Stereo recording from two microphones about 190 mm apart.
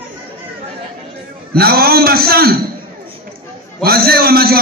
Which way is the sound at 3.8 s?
50° right (ahead or behind).